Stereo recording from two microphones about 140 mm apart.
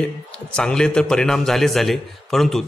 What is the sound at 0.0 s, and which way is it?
A man's voice, 5° left (ahead or behind).